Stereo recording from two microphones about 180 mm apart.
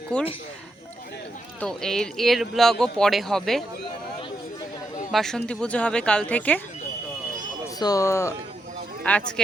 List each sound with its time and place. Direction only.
0.1 s speech: 5° left (ahead or behind)
1.6 s speech: 5° left (ahead or behind)
5.1 s speech: 5° left (ahead or behind)
7.8 s speech: 20° left (ahead or behind)